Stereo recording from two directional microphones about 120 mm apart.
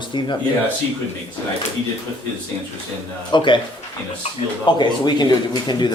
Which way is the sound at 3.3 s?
40° left (ahead or behind).